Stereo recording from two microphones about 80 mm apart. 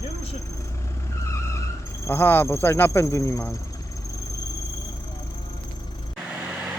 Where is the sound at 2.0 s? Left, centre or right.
Left.